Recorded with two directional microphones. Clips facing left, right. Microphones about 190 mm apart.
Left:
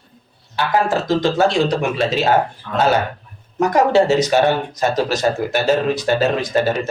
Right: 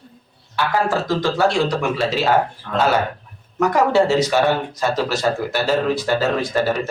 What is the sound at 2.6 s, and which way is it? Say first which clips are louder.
Speech: right 1 dB; 50° right (ahead or behind).